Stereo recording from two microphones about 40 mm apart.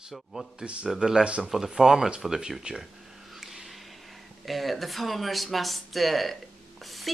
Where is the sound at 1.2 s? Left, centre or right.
Right.